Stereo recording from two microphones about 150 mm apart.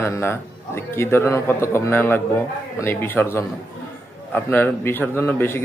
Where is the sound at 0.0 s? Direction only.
15° left (ahead or behind).